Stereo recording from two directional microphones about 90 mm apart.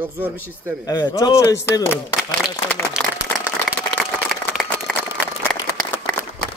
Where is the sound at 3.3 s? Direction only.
20° left (ahead or behind).